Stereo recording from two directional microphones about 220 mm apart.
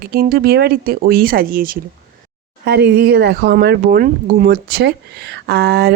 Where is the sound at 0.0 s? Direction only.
45° right (ahead or behind).